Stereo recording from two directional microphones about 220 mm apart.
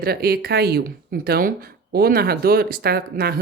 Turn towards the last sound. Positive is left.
turn(degrees=-45)  # may be behind; listen again after turning